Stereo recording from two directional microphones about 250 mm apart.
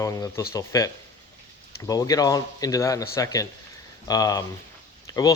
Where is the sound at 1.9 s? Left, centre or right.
Centre.